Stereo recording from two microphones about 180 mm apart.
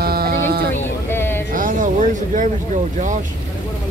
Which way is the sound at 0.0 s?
55° right (ahead or behind).